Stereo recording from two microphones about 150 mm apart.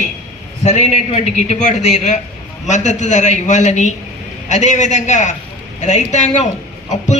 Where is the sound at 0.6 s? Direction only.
45° left (ahead or behind).